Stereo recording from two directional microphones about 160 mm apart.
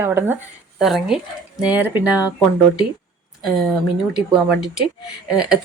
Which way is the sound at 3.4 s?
Centre (ahead or behind).